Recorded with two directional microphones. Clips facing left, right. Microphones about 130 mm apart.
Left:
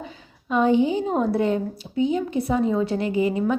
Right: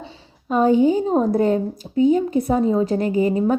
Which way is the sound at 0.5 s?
40° right (ahead or behind).